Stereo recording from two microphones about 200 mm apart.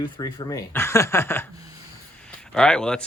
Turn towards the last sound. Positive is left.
turn(degrees=5)  # may be behind; listen again after turning